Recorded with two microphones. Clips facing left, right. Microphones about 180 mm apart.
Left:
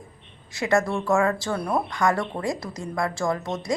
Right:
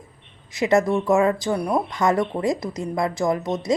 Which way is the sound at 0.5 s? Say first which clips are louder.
Right 4 dB; 20° right (ahead or behind).